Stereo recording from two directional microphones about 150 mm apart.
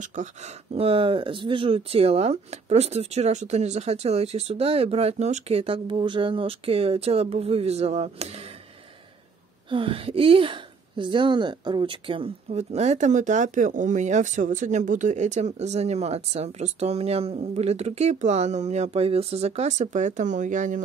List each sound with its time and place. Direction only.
0.0 s speech: 55° right (ahead or behind)
9.7 s speech: 35° right (ahead or behind)
12.4 s speech: 45° right (ahead or behind)